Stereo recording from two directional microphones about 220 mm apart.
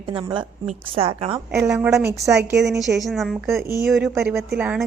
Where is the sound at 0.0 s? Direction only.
25° right (ahead or behind).